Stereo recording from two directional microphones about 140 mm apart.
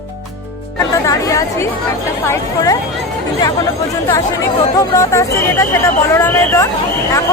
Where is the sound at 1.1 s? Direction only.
25° left (ahead or behind).